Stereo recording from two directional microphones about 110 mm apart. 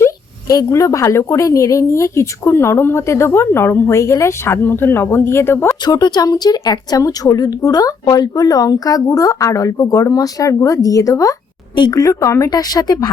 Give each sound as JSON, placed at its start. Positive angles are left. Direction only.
{"t": 0.0, "sound": "a woman's voice", "side_deg": 30}
{"t": 5.8, "sound": "a woman's voice", "side_deg": 40}